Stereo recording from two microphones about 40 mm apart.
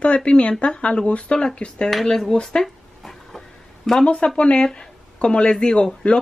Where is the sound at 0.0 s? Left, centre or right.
Left.